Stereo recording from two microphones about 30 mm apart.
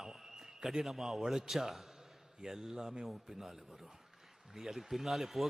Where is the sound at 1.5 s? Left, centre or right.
Centre.